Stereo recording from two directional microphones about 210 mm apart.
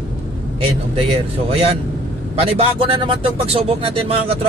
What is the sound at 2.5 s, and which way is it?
Speech, 25° right (ahead or behind).